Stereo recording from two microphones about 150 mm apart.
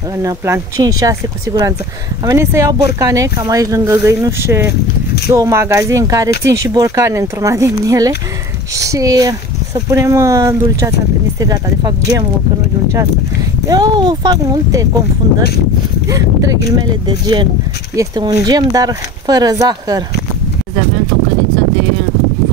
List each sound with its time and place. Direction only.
0.2 s speech: 20° right (ahead or behind)
13.7 s speech: 30° right (ahead or behind)
16.1 s speech: 20° right (ahead or behind)